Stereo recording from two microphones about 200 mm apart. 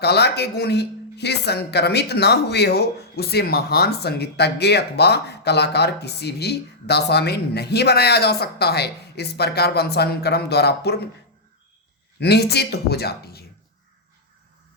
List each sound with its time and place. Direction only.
0.0 s a man's voice: 55° left (ahead or behind)
12.2 s speech: 55° left (ahead or behind)